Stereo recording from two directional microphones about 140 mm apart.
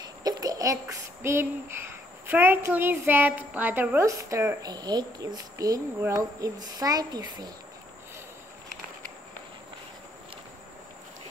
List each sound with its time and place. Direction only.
0.2 s a woman's voice: 25° right (ahead or behind)